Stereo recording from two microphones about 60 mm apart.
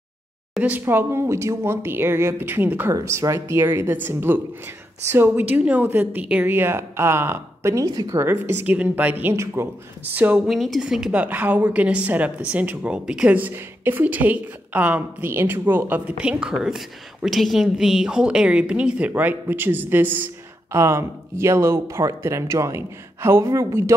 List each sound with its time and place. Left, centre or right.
0.7 s speech: right
2.3 s a woman's voice: right
7.7 s speech: right
8.2 s a woman's voice: right
8.6 s a woman's voice: right
10.4 s a woman's voice: centre
11.1 s a woman's voice: right
13.4 s a woman's voice: right
16.2 s a woman's voice: centre; by 20.2 s right
20.7 s speech: right